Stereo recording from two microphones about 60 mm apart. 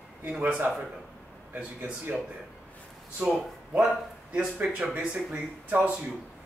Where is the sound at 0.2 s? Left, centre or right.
Right.